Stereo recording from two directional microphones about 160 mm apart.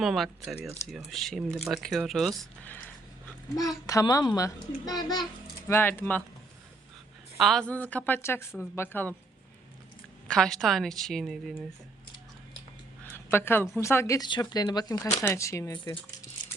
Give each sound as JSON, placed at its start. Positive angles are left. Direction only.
{"t": 0.0, "sound": "speech", "side_deg": 0}
{"t": 3.5, "sound": "speech", "side_deg": 20}
{"t": 5.6, "sound": "a woman's voice", "side_deg": 15}
{"t": 7.3, "sound": "a woman's voice", "side_deg": 0}
{"t": 10.2, "sound": "speech", "side_deg": 5}
{"t": 13.1, "sound": "a woman's voice", "side_deg": 15}